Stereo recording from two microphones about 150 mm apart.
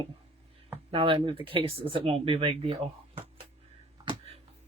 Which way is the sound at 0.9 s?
35° right (ahead or behind).